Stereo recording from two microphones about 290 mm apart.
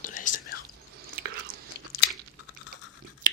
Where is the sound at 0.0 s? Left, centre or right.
Left.